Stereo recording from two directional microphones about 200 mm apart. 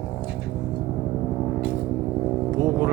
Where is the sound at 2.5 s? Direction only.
15° right (ahead or behind).